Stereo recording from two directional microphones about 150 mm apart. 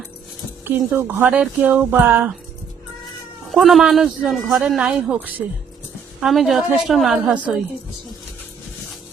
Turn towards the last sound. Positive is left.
turn(degrees=-10)  # may be behind; listen again after turning